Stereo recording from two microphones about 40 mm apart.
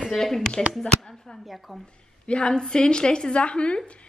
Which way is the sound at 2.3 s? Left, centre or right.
Left.